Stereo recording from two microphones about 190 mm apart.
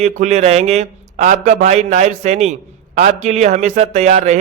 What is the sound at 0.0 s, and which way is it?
A man's voice, 40° right (ahead or behind).